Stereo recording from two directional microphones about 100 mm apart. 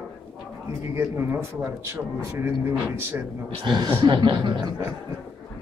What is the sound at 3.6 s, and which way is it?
Speech, 50° right (ahead or behind).